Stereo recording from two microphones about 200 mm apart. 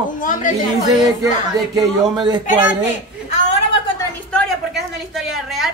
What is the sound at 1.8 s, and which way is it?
Speech, 20° right (ahead or behind).